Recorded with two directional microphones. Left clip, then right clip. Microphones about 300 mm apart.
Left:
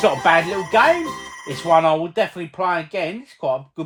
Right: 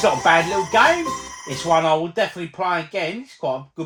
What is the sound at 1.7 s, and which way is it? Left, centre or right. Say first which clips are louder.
Speech: left 2 dB; left.